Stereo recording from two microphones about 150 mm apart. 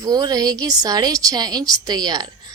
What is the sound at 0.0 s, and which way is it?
Speech, 25° right (ahead or behind).